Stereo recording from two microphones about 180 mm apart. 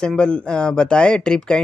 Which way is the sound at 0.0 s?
5° left (ahead or behind).